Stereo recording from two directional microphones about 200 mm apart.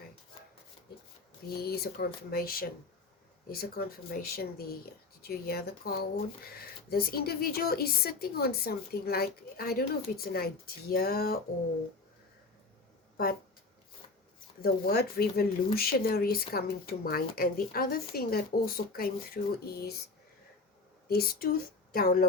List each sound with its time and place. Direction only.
1.5 s speech: 50° left (ahead or behind)
14.6 s speech: 50° left (ahead or behind)
21.1 s speech: 50° left (ahead or behind)